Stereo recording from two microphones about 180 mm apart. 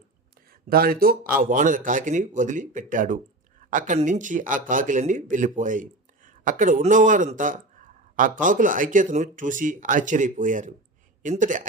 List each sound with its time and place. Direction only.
0.7 s a man's voice: 55° right (ahead or behind)